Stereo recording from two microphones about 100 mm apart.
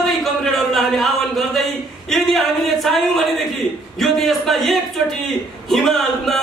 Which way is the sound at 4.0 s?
5° left (ahead or behind).